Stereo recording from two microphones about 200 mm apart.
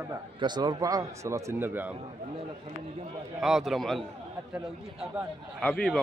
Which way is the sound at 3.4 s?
Centre (ahead or behind).